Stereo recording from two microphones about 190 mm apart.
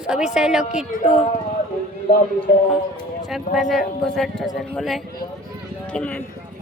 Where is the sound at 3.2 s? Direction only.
Centre (ahead or behind).